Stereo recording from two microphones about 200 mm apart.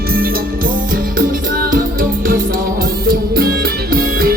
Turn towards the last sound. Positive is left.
turn(degrees=-50)  # may be behind; listen again after turning